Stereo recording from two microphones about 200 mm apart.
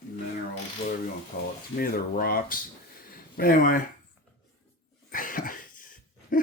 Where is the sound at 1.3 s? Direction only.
40° left (ahead or behind).